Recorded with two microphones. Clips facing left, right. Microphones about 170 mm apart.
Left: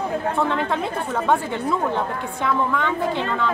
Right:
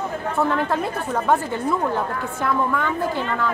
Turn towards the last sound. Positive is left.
turn(degrees=-5)  # may be behind; listen again after turning